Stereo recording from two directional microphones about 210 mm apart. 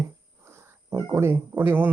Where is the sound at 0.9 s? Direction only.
15° right (ahead or behind).